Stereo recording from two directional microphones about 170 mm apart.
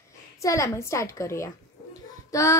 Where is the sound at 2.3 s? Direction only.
20° left (ahead or behind).